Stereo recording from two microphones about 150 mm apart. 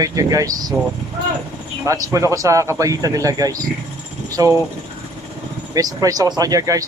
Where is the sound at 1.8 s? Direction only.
20° right (ahead or behind).